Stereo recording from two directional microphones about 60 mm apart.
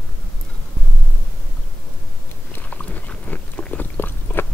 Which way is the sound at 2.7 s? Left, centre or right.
Left.